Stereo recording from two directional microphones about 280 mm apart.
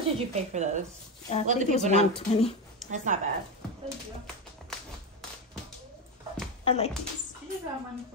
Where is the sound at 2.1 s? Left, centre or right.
Left.